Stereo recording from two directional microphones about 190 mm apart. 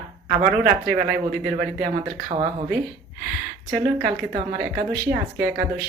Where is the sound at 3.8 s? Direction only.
45° right (ahead or behind).